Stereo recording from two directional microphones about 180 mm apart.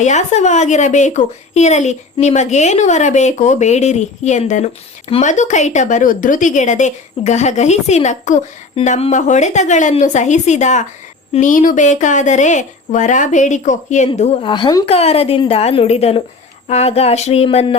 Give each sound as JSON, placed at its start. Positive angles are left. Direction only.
{"t": 0.0, "sound": "a woman's voice", "side_deg": 40}
{"t": 14.8, "sound": "a woman's voice", "side_deg": 35}